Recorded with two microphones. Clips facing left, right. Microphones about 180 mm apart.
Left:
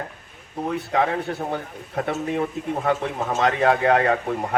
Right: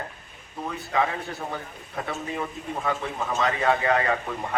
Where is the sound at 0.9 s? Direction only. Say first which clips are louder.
Left 3 dB; 65° left (ahead or behind).